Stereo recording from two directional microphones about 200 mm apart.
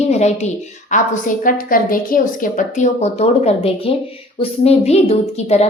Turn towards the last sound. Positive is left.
turn(degrees=30)  # may be behind; listen again after turning